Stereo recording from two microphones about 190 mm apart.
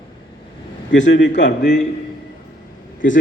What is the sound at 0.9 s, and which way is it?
Speech, 70° left (ahead or behind).